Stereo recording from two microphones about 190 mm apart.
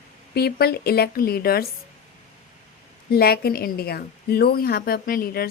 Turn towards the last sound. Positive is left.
turn(degrees=50)  # may be behind; listen again after turning